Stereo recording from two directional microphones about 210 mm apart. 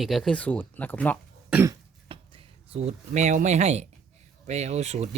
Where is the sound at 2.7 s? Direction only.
30° right (ahead or behind).